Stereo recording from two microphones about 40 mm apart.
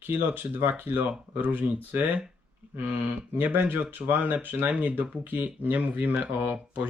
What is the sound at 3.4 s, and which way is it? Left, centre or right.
Speech, right.